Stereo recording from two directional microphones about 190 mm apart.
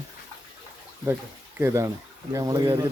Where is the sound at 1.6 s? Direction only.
15° right (ahead or behind).